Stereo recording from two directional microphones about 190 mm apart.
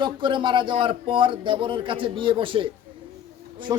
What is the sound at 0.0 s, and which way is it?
A man's voice, 25° right (ahead or behind).